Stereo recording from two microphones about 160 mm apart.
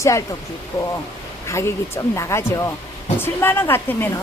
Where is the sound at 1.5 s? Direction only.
15° left (ahead or behind).